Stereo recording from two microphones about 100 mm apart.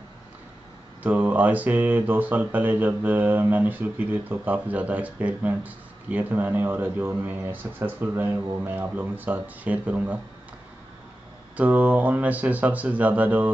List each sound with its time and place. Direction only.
1.0 s speech: 15° right (ahead or behind)
11.5 s speech: 15° right (ahead or behind)